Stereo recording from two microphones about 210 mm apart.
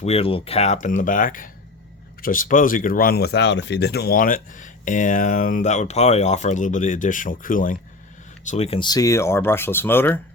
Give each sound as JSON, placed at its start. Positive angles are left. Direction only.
{"t": 0.0, "sound": "speech", "side_deg": 30}